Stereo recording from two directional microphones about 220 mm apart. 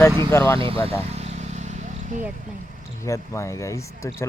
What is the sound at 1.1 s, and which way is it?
Vehicle, 30° right (ahead or behind).